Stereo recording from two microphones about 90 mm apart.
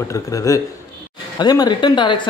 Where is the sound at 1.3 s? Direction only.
50° left (ahead or behind).